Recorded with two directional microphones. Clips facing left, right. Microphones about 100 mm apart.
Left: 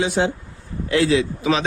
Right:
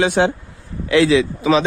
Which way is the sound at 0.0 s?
65° right (ahead or behind).